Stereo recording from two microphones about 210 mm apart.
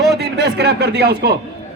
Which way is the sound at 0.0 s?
50° right (ahead or behind).